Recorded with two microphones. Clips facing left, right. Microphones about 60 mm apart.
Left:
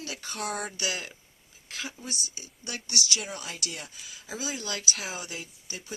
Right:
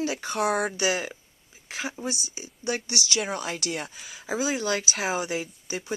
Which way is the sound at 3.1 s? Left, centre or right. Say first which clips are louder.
Right 6 dB; right.